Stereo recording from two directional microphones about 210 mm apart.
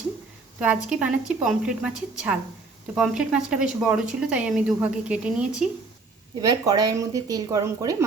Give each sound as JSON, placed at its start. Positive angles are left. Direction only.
{"t": 0.6, "sound": "speech", "side_deg": -5}
{"t": 6.4, "sound": "speech", "side_deg": -15}